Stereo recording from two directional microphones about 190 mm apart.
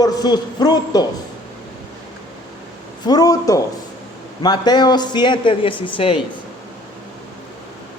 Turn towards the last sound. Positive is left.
turn(degrees=30)  # may be behind; listen again after turning